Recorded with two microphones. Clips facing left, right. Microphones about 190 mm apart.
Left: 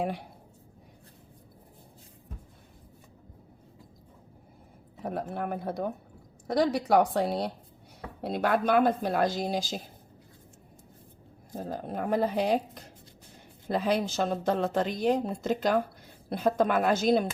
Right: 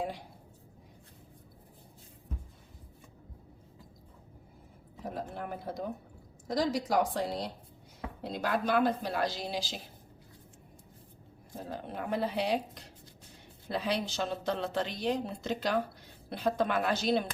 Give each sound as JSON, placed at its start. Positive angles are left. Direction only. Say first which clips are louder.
{"t": 5.3, "sound": "a woman's voice", "louder": "left 6 dB", "side_deg": 60}
{"t": 11.5, "sound": "a woman's voice", "louder": "left 5 dB", "side_deg": 45}